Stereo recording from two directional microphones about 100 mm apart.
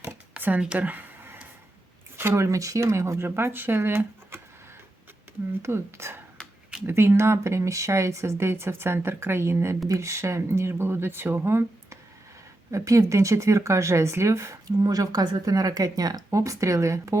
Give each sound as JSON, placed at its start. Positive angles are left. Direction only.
{"t": 0.3, "sound": "a sound", "side_deg": -15}
{"t": 2.1, "sound": "speech", "side_deg": -25}
{"t": 5.6, "sound": "speech", "side_deg": -25}